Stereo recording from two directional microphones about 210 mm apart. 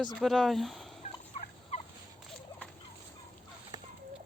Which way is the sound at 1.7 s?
35° left (ahead or behind).